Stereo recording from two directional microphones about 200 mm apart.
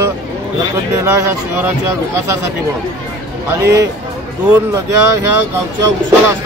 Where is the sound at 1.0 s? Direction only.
15° right (ahead or behind).